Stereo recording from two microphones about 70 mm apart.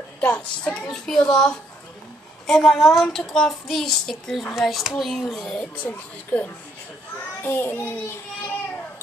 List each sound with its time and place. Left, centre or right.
0.2 s a child's voice: centre
5.8 s speech: centre
7.4 s a child's voice: left